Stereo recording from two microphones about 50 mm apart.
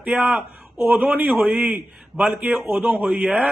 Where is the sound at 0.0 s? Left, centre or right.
Right.